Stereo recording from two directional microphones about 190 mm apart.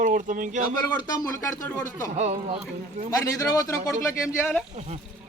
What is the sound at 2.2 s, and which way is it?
Speech, 35° right (ahead or behind).